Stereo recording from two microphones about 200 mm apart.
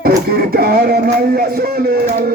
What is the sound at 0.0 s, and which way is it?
Music, 50° right (ahead or behind).